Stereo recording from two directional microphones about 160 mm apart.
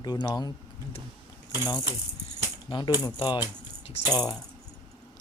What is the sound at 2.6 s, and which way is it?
Speech, 30° left (ahead or behind).